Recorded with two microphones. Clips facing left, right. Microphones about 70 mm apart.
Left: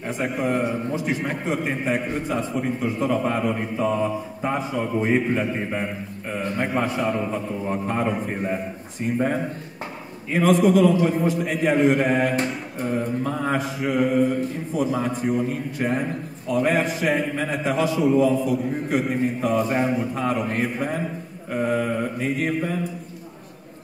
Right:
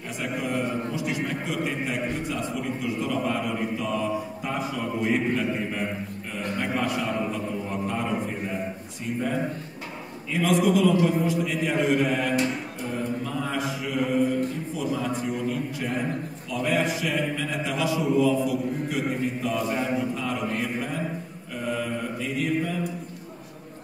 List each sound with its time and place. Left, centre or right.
0.4 s a man's voice: left
6.3 s a man's voice: left